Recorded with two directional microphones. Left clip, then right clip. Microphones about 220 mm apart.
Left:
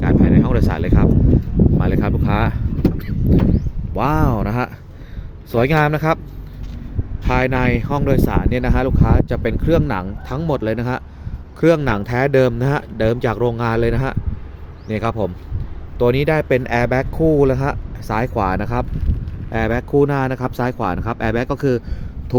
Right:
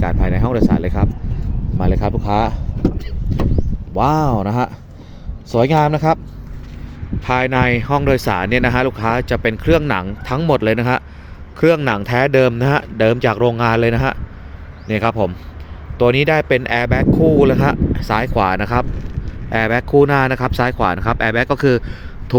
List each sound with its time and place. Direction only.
0.0 s a sound: centre (ahead or behind)
1.8 s vehicle: 5° right (ahead or behind)
3.9 s speech: 5° right (ahead or behind)
7.3 s speech: centre (ahead or behind)